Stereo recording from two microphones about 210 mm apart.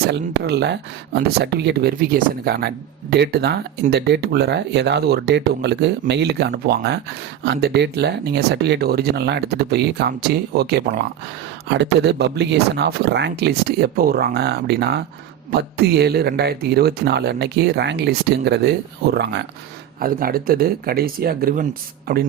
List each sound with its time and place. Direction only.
0.1 s speech: 50° right (ahead or behind)
20.0 s speech: 45° right (ahead or behind)